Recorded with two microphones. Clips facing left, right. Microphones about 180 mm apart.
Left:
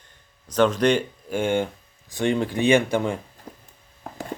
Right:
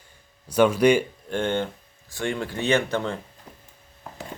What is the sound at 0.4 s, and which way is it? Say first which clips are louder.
Speech: right 1 dB; 10° right (ahead or behind).